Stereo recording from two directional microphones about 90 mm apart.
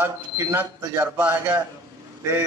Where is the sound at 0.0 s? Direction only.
30° right (ahead or behind).